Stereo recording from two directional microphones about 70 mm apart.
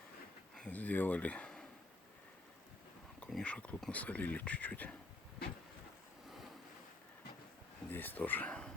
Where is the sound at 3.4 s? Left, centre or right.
Centre.